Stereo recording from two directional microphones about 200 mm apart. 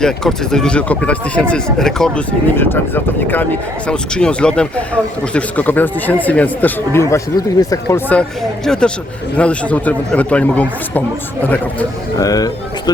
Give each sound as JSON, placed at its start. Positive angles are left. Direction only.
{"t": 0.0, "sound": "speech", "side_deg": 0}